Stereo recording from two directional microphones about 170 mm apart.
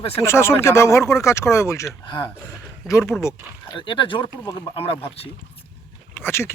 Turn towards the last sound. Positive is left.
turn(degrees=15)  # may be behind; listen again after turning